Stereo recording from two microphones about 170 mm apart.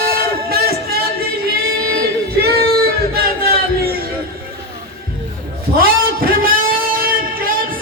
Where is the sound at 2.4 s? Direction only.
65° right (ahead or behind).